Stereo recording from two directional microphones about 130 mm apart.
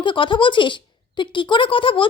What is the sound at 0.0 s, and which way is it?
A woman's voice, 40° left (ahead or behind).